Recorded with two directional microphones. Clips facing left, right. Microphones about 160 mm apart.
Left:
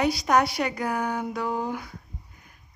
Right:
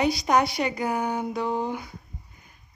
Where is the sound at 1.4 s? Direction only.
25° right (ahead or behind).